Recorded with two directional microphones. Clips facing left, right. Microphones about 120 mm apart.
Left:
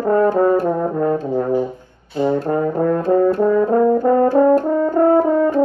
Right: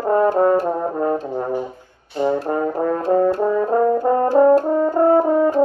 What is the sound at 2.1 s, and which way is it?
Brass instrument, 10° right (ahead or behind).